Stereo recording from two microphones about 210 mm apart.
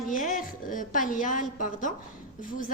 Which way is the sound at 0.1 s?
40° left (ahead or behind).